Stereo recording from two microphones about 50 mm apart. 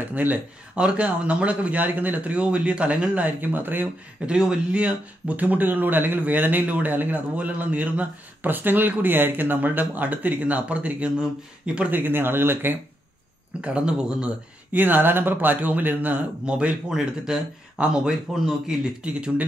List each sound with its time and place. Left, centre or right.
0.0 s speech: right
0.7 s a man's voice: right
4.3 s speech: centre
11.9 s speech: right
13.6 s a man's voice: right
14.7 s speech: right
16.4 s a man's voice: right
18.3 s speech: centre
19.0 s a man's voice: right